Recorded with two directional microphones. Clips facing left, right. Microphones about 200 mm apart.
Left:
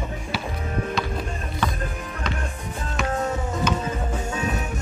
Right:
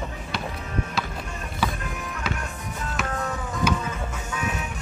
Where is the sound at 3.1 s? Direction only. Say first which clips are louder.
Left 4 dB; 25° left (ahead or behind).